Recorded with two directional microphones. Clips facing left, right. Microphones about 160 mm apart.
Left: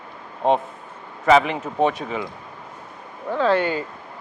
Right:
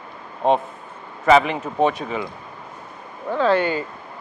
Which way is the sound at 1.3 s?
10° right (ahead or behind).